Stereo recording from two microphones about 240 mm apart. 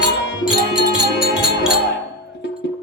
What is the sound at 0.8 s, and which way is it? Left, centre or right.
Music, left.